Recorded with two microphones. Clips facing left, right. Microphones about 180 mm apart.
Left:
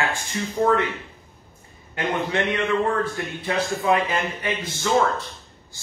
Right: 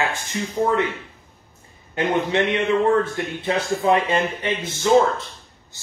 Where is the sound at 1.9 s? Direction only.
25° right (ahead or behind).